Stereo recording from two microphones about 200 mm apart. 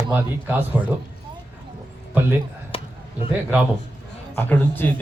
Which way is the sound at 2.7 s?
25° left (ahead or behind).